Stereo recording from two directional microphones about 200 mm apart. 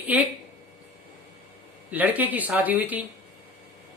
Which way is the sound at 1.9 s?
10° right (ahead or behind).